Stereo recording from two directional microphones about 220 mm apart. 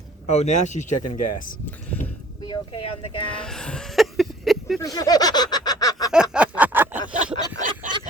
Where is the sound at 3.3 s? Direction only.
5° left (ahead or behind).